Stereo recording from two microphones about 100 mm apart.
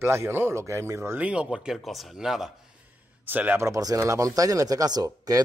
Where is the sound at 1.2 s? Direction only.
10° right (ahead or behind).